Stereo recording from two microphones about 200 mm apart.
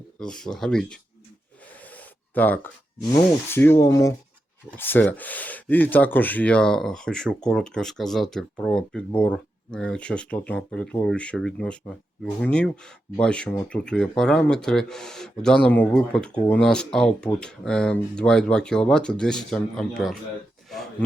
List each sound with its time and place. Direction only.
0.2 s speech: 5° left (ahead or behind)
1.8 s a sound: 10° left (ahead or behind)
3.5 s speech: 10° left (ahead or behind)